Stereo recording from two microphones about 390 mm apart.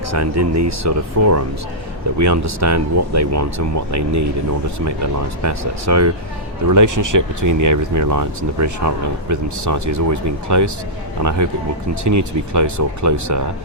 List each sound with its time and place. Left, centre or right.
0.1 s speech: right
5.4 s speech: right